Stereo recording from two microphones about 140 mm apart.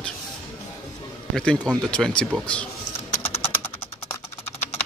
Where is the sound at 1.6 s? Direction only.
5° left (ahead or behind).